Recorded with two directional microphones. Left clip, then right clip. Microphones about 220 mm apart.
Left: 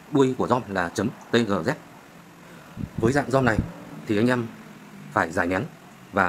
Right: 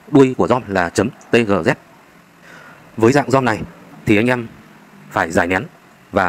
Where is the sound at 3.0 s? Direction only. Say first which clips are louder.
Right 8 dB; 30° right (ahead or behind).